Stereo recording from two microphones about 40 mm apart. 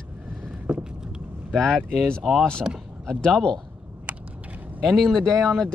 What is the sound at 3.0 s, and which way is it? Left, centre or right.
Speech, centre.